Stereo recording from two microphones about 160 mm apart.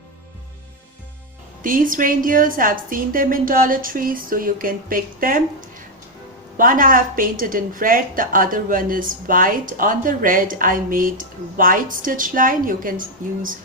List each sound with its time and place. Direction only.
1.6 s a woman's voice: 60° right (ahead or behind)